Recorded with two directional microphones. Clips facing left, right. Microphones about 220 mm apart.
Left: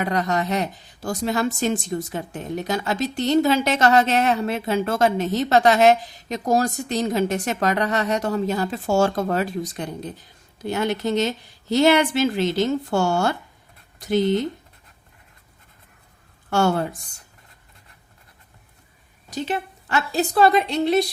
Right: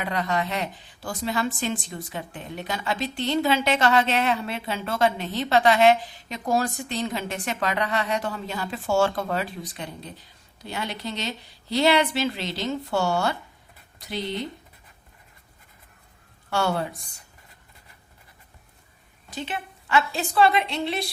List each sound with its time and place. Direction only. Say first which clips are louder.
0.0 s a woman's voice: left 4 dB; 45° left (ahead or behind)
16.5 s a woman's voice: left 5 dB; 45° left (ahead or behind)
19.3 s a woman's voice: left 6 dB; 40° left (ahead or behind)